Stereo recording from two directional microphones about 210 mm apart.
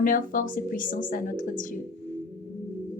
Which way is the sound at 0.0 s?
40° left (ahead or behind).